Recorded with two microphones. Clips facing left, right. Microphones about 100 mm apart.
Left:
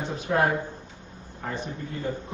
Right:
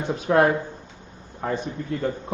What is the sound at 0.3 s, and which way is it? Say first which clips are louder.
A man's voice: right 5 dB; 55° right (ahead or behind).